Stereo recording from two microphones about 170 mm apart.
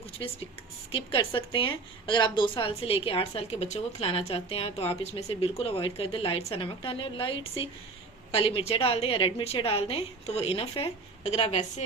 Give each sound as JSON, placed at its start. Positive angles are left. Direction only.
{"t": 0.9, "sound": "a woman's voice", "side_deg": 35}